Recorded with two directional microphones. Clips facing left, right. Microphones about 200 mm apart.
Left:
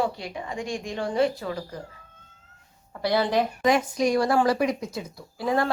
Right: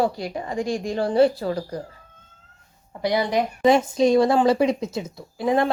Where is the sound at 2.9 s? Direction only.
15° right (ahead or behind).